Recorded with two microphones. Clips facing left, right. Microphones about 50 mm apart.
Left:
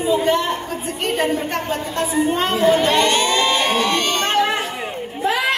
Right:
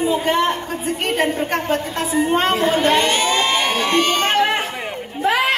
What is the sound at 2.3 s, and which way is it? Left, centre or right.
Speech, right.